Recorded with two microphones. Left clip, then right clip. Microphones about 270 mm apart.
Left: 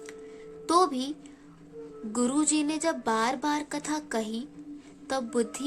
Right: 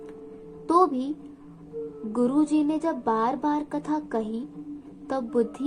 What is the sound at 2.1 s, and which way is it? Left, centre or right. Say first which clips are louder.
A woman's voice: right 4 dB; left.